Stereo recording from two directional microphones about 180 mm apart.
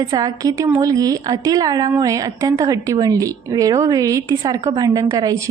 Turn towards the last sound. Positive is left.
turn(degrees=-20)  # may be behind; listen again after turning